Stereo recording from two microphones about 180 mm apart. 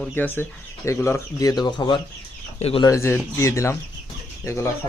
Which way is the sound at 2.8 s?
15° left (ahead or behind).